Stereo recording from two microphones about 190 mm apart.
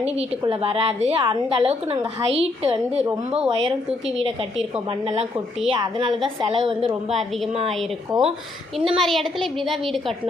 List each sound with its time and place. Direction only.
0.0 s a woman's voice: 30° right (ahead or behind)
5.6 s a woman's voice: 25° right (ahead or behind)
8.1 s a woman's voice: centre (ahead or behind)